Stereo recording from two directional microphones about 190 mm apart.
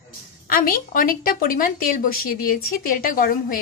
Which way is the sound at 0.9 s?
50° left (ahead or behind).